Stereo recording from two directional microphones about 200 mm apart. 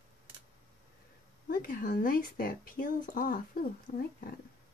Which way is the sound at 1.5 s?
45° left (ahead or behind).